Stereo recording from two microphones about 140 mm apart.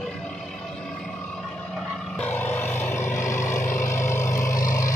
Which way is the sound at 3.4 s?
65° left (ahead or behind).